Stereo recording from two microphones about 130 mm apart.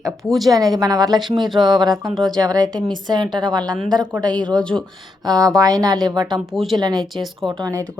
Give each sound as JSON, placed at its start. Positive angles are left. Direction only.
{"t": 0.3, "sound": "speech", "side_deg": 0}
{"t": 0.5, "sound": "a woman's voice", "side_deg": -30}
{"t": 7.0, "sound": "speech", "side_deg": 0}
{"t": 7.6, "sound": "speech", "side_deg": -25}